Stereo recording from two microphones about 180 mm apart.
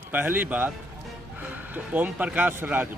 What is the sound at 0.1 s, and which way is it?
Speech, 10° right (ahead or behind).